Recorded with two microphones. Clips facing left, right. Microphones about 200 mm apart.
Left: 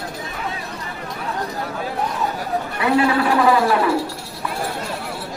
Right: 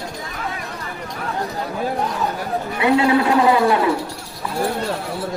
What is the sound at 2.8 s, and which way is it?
A man's voice, 20° right (ahead or behind).